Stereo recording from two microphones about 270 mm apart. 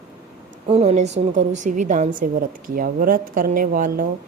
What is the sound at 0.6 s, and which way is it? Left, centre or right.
A woman's voice, right.